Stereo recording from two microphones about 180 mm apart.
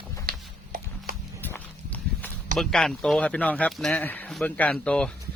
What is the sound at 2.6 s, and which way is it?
Speech, 5° left (ahead or behind).